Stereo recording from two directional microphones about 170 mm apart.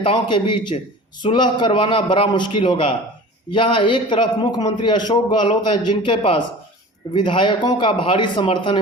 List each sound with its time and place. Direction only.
0.0 s a man's voice: 30° left (ahead or behind)